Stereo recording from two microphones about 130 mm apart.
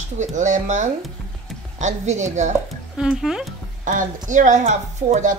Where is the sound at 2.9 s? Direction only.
5° right (ahead or behind).